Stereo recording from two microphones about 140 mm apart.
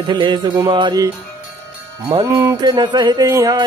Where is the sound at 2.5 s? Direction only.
30° right (ahead or behind).